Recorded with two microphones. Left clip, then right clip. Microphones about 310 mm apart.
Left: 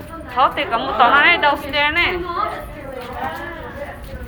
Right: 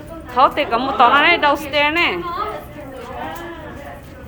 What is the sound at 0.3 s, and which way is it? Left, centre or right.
A woman's voice, right.